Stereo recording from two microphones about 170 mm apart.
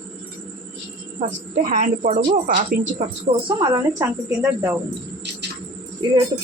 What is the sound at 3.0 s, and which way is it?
Speech, 40° right (ahead or behind).